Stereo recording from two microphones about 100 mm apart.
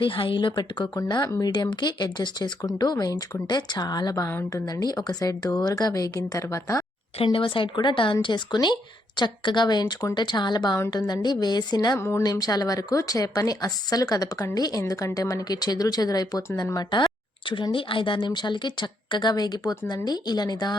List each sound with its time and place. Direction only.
0.0 s a woman's voice: 60° left (ahead or behind); by 6.8 s 35° left (ahead or behind)
7.3 s a woman's voice: 55° left (ahead or behind)
11.9 s speech: 25° left (ahead or behind)
12.2 s a woman's voice: 40° left (ahead or behind)
17.5 s a woman's voice: 55° left (ahead or behind)